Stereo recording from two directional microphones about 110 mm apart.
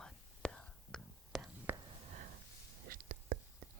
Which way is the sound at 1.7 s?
20° right (ahead or behind).